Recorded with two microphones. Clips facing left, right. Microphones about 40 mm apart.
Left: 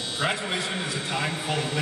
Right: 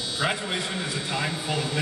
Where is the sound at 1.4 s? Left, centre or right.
Left.